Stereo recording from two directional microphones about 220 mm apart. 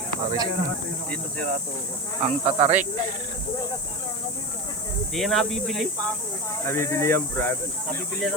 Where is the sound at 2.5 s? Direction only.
30° right (ahead or behind).